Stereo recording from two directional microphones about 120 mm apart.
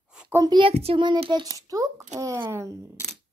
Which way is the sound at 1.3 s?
30° right (ahead or behind).